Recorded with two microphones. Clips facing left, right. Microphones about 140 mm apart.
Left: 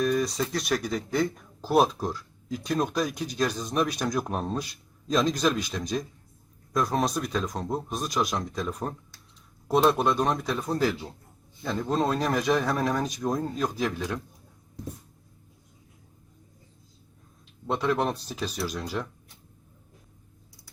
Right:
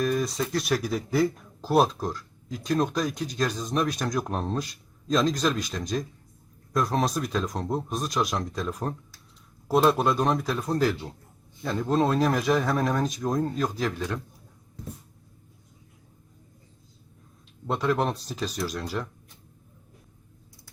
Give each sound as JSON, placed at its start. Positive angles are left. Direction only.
{"t": 0.0, "sound": "speech", "side_deg": 0}
{"t": 17.7, "sound": "speech", "side_deg": 0}